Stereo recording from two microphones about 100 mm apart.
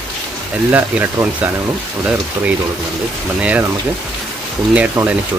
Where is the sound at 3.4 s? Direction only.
10° right (ahead or behind).